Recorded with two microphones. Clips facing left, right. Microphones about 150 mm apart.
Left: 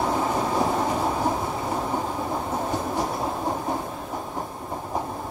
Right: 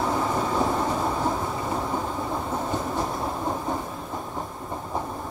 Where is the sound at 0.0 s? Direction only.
15° left (ahead or behind).